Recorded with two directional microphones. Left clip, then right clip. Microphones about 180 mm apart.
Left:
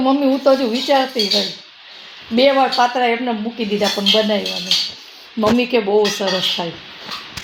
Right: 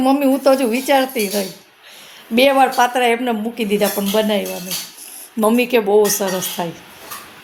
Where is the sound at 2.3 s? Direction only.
15° right (ahead or behind).